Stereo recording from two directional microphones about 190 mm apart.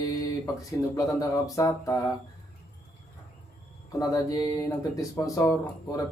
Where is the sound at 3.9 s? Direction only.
20° left (ahead or behind).